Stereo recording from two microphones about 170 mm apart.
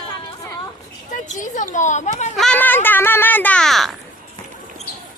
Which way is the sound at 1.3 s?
50° left (ahead or behind).